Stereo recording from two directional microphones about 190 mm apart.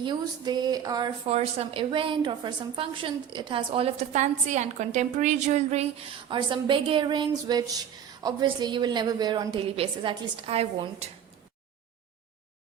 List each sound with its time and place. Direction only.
0.0 s a woman's voice: 25° right (ahead or behind)
1.3 s a woman's voice: 30° right (ahead or behind)